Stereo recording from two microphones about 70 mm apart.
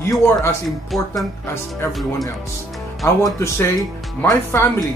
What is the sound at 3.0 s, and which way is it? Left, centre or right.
Speech, left.